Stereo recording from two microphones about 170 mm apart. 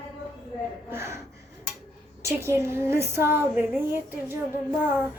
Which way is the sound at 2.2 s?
15° right (ahead or behind).